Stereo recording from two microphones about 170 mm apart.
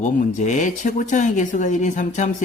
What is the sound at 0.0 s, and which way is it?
Speech, 45° left (ahead or behind).